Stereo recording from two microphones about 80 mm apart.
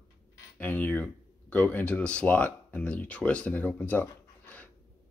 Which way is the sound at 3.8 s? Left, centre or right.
Left.